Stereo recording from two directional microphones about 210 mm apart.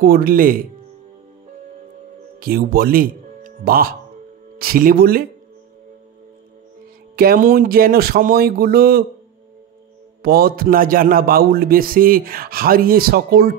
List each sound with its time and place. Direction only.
0.0 s a man's voice: 45° right (ahead or behind)
2.4 s a man's voice: 45° right (ahead or behind)
7.2 s a man's voice: 45° right (ahead or behind)
10.2 s a man's voice: 45° right (ahead or behind)